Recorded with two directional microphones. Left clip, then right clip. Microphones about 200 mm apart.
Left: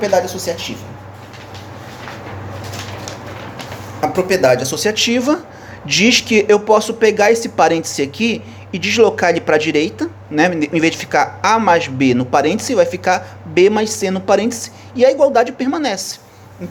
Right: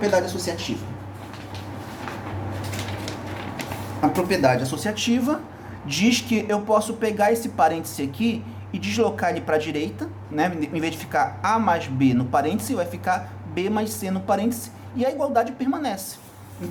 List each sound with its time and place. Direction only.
0.0 s speech: 35° left (ahead or behind)
4.0 s speech: 45° left (ahead or behind); by 16.0 s 30° left (ahead or behind)